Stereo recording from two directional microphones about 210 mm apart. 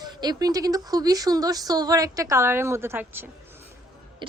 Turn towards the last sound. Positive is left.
turn(degrees=-10)  # may be behind; listen again after turning